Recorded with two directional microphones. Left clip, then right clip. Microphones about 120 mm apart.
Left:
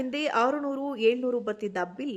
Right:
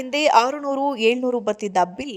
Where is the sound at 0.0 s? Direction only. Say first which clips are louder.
Right 9 dB; 35° right (ahead or behind).